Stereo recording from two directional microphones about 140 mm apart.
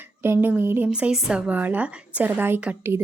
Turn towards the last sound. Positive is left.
turn(degrees=-15)  # may be behind; listen again after turning